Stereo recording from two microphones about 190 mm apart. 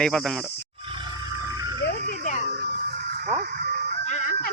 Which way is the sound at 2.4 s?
55° right (ahead or behind).